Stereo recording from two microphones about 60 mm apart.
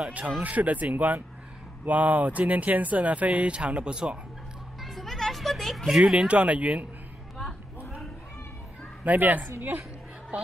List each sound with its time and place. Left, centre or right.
0.4 s speech: right
4.8 s a sound: centre
5.9 s speech: centre
6.1 s speech: right
9.0 s a woman's voice: right
10.3 s a sound: right